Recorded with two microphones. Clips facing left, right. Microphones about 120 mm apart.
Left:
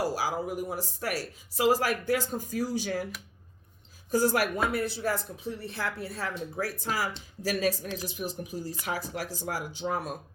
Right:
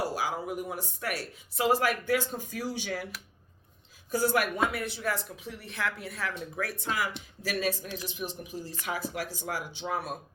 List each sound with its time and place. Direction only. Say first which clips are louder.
0.0 s speech: left 2 dB; 40° left (ahead or behind)
4.1 s speech: left 2 dB; 40° left (ahead or behind)